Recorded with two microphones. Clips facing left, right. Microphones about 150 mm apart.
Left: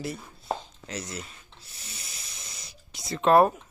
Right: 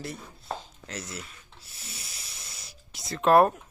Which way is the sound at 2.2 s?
5° right (ahead or behind).